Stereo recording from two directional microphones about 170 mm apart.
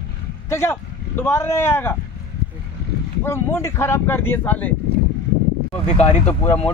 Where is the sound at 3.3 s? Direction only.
15° left (ahead or behind).